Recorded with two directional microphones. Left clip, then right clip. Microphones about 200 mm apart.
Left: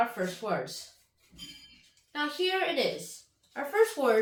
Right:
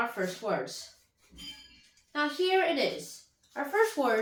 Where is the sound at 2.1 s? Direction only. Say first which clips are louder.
Right 2 dB; 20° left (ahead or behind).